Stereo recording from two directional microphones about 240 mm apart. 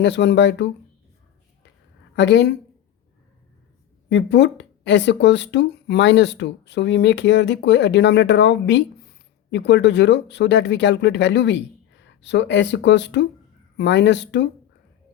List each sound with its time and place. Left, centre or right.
0.0 s speech: left
2.1 s speech: left
4.1 s speech: left